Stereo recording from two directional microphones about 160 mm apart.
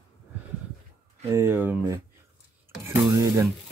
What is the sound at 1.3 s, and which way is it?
Speech, 15° right (ahead or behind).